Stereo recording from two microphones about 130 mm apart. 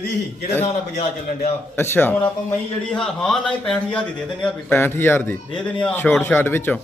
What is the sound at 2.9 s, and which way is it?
A man's voice, 5° left (ahead or behind).